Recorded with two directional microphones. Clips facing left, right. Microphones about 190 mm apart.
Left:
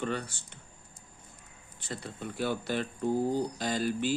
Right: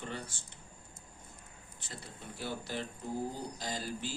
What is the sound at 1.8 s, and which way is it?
Speech, 70° left (ahead or behind).